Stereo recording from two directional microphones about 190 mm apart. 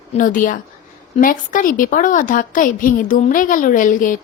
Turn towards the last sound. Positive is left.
turn(degrees=45)  # may be behind; listen again after turning